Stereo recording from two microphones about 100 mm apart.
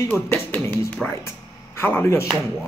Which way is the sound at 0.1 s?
15° left (ahead or behind).